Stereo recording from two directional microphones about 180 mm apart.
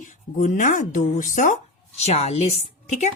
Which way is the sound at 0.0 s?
45° left (ahead or behind).